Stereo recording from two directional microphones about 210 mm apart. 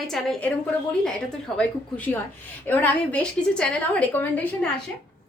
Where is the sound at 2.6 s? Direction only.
5° left (ahead or behind).